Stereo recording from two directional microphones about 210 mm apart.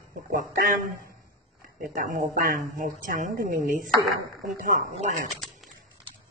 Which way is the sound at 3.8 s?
Centre (ahead or behind).